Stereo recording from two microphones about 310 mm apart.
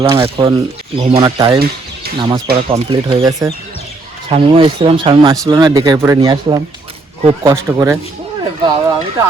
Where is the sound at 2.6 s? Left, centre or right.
Centre.